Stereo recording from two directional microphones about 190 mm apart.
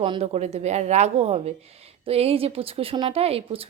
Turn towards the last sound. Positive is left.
turn(degrees=-30)  # may be behind; listen again after turning